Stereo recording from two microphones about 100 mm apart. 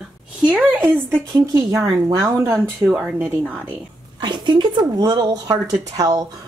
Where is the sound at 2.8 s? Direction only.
15° right (ahead or behind).